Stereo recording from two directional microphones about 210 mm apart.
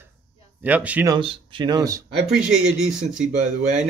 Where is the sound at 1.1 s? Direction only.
20° right (ahead or behind).